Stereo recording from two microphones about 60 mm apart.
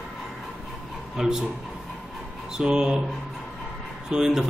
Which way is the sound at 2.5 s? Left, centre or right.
Centre.